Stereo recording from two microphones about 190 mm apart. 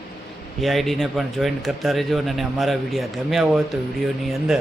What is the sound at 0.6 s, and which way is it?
Speech, centre (ahead or behind).